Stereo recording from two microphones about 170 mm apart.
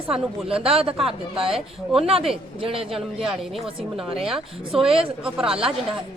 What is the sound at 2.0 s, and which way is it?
Speech, 35° right (ahead or behind).